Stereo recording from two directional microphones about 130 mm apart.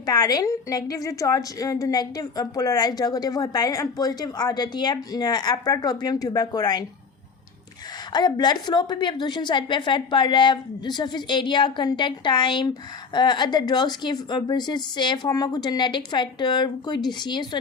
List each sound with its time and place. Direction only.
0.0 s a woman's voice: 30° left (ahead or behind)
8.1 s a woman's voice: 35° left (ahead or behind)